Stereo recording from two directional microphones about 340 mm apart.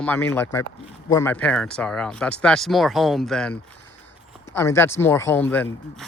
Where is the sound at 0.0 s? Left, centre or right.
Centre.